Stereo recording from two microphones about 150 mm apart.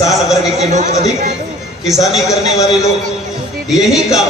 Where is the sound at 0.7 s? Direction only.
50° right (ahead or behind).